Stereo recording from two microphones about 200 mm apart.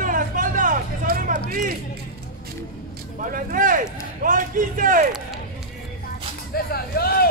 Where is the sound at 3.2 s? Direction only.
40° right (ahead or behind).